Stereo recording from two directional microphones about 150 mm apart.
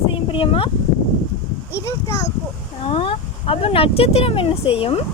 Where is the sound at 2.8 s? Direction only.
35° left (ahead or behind).